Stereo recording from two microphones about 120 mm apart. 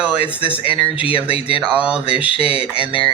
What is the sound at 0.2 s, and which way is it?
Speech, 50° left (ahead or behind).